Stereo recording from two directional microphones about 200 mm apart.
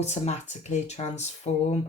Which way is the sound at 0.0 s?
35° left (ahead or behind).